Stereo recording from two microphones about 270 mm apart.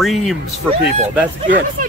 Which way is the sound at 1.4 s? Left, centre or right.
Right.